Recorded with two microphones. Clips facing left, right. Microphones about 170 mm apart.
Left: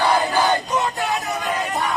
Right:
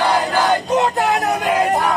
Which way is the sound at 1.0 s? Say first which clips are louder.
Right 6 dB; 70° right (ahead or behind).